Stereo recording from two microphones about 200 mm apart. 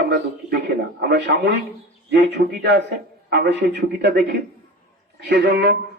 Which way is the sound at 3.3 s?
60° right (ahead or behind).